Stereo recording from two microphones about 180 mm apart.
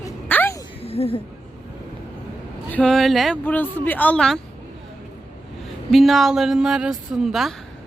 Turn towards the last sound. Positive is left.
turn(degrees=0)  # may be behind; listen again after turning